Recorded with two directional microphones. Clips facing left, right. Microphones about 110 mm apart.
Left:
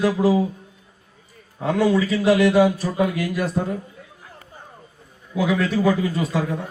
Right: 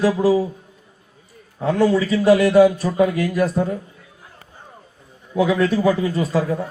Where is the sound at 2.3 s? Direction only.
40° right (ahead or behind).